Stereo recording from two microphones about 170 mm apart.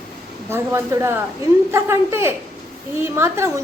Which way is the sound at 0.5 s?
15° right (ahead or behind).